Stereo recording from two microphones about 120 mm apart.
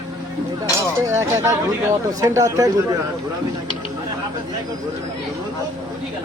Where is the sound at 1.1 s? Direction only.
25° right (ahead or behind).